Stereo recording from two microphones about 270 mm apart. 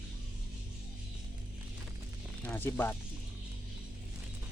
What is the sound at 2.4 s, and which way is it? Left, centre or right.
Speech, centre.